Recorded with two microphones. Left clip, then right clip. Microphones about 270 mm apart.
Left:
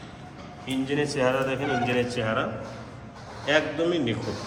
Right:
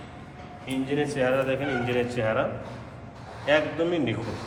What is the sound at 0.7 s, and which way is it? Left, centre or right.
A man's voice, centre.